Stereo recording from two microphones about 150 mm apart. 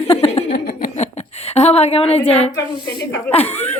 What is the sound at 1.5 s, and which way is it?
Speech, 45° left (ahead or behind).